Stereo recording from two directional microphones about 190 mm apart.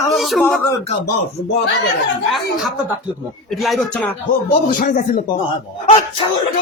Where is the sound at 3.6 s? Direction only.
5° left (ahead or behind).